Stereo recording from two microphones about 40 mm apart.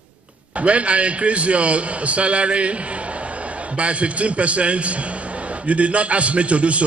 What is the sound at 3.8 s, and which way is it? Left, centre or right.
Speech, right.